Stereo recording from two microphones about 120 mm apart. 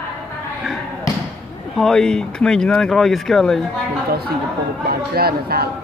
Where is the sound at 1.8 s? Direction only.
5° left (ahead or behind).